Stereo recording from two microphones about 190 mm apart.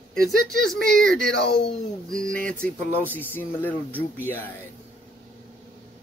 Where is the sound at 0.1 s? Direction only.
Centre (ahead or behind).